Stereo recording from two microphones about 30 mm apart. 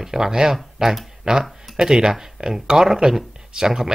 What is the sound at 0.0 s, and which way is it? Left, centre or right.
Speech, centre.